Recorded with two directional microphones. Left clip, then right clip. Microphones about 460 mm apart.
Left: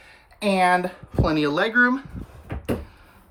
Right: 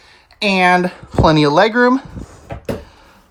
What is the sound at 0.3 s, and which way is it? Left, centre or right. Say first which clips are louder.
Speech: right 6 dB; centre.